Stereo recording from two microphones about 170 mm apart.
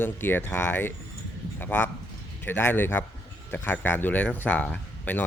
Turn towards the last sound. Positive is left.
turn(degrees=10)  # may be behind; listen again after turning